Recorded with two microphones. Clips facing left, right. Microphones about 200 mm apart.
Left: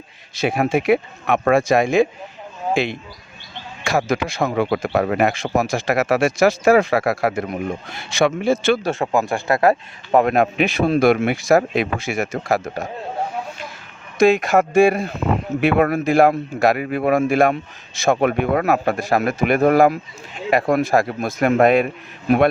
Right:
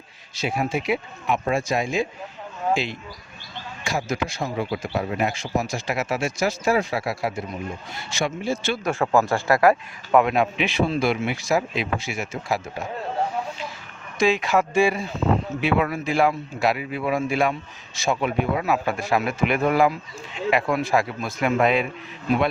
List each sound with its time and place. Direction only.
0.4 s speech: 65° left (ahead or behind)
2.7 s speech: 60° left (ahead or behind)
3.8 s a man's voice: 80° left
4.4 s a man's voice: 65° left (ahead or behind)
8.8 s speech: 20° left (ahead or behind)
10.2 s a man's voice: 45° left (ahead or behind)
14.2 s a man's voice: 45° left (ahead or behind)